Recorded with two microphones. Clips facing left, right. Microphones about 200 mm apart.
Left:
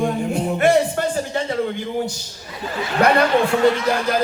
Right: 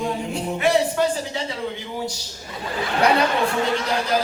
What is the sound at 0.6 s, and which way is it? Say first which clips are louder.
Speech: left 2 dB; 50° left (ahead or behind).